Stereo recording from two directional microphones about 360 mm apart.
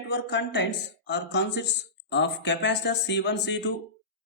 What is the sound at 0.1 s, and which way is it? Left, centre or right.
Speech, left.